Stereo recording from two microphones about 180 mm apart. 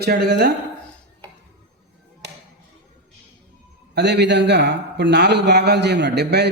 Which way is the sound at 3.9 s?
70° right (ahead or behind).